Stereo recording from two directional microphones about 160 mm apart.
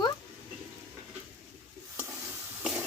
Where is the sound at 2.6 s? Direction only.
5° right (ahead or behind).